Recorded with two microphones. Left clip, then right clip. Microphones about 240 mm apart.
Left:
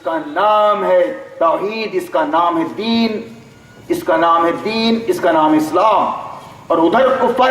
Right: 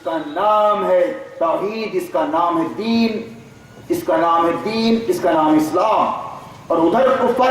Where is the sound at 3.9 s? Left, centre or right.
Centre.